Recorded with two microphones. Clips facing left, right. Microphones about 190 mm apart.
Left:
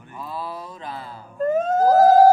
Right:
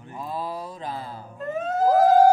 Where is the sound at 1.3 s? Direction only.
45° left (ahead or behind).